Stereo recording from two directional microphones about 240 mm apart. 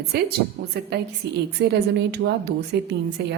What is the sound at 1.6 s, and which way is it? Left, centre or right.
A woman's voice, right.